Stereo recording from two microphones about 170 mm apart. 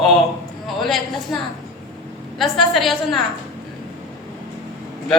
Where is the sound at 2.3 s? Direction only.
Centre (ahead or behind).